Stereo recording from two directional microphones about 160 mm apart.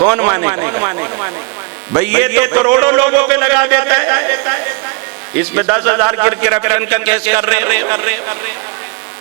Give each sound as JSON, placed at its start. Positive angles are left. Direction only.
{"t": 0.0, "sound": "a man's voice", "side_deg": -10}